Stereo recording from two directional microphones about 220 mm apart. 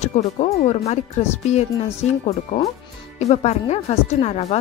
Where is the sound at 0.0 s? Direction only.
30° left (ahead or behind).